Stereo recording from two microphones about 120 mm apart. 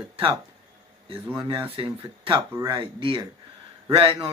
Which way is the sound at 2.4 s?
25° right (ahead or behind).